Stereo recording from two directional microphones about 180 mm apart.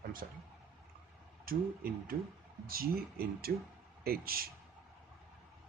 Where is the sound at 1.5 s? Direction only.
55° right (ahead or behind).